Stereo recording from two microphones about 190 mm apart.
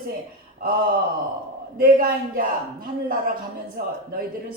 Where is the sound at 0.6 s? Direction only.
50° right (ahead or behind).